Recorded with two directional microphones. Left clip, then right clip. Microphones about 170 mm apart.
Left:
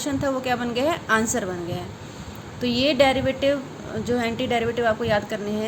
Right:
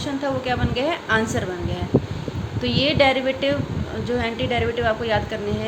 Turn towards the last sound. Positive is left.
turn(degrees=25)  # may be behind; listen again after turning